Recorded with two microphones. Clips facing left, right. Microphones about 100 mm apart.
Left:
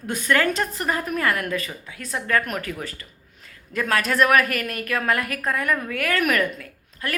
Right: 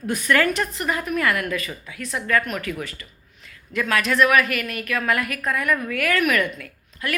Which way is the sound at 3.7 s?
40° left (ahead or behind).